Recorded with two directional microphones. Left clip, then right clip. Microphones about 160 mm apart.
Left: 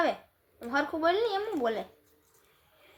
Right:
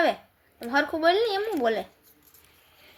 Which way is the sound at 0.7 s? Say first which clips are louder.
Right 5 dB; 35° right (ahead or behind).